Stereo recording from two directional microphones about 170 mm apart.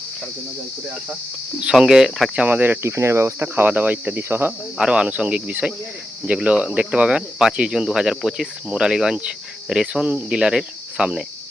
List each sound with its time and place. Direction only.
1.6 s speech: 5° right (ahead or behind)